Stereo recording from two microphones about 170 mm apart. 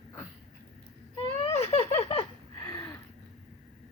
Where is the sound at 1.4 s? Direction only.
40° left (ahead or behind).